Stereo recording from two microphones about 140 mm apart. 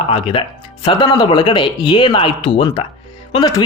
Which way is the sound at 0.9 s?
35° left (ahead or behind).